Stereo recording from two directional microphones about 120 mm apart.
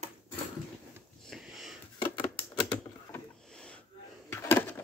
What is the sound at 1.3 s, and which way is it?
Wheeze, centre (ahead or behind).